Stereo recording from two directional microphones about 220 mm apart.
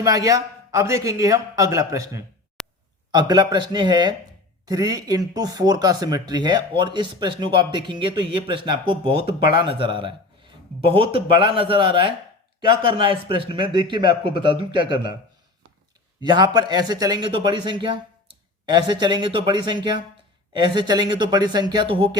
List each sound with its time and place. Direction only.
0.0 s speech: 15° right (ahead or behind)
2.6 s a sound: 5° left (ahead or behind)
3.1 s speech: 20° right (ahead or behind)
16.2 s speech: 20° right (ahead or behind)